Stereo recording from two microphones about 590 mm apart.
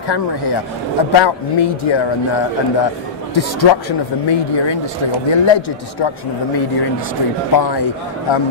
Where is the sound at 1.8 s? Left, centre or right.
Left.